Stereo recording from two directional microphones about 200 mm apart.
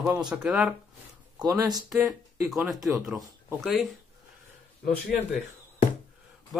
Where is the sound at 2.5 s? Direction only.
Centre (ahead or behind).